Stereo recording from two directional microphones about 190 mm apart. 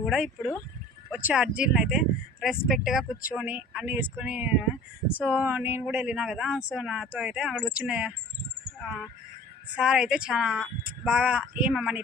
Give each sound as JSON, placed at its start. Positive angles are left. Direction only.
{"t": 0.0, "sound": "speech", "side_deg": 0}